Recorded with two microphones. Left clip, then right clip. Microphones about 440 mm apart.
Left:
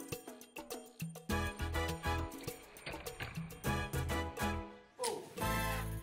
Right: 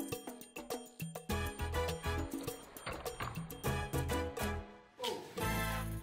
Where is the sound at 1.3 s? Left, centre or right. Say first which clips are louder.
Left 1 dB; right.